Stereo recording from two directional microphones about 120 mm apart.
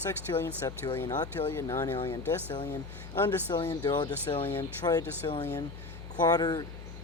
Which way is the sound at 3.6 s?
35° left (ahead or behind).